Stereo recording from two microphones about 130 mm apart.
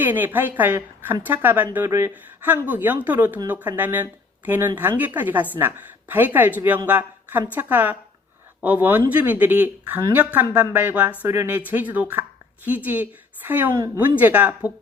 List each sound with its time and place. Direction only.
0.0 s a woman's voice: 15° right (ahead or behind)
13.7 s speech: 25° right (ahead or behind)
14.0 s speech: 15° right (ahead or behind)